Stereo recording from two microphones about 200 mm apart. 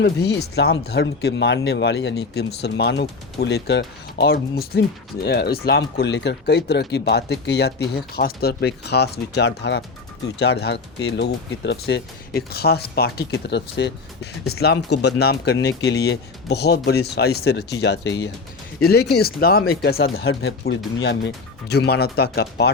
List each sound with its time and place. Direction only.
0.0 s speech: 55° left (ahead or behind); by 14.6 s 75° left (ahead or behind)
14.6 s speech: 55° left (ahead or behind)